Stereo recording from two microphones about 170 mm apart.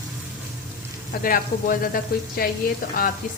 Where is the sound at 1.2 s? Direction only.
55° left (ahead or behind).